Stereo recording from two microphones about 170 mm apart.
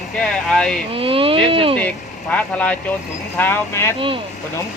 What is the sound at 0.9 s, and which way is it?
Speech, 35° right (ahead or behind).